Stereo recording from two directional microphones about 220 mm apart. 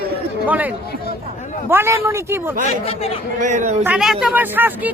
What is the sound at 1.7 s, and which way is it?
Speech, 10° right (ahead or behind).